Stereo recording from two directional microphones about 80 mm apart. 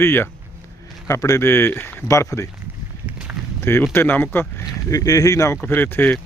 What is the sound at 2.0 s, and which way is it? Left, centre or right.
Speech, left.